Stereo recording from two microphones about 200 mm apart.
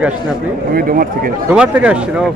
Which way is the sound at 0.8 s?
45° right (ahead or behind).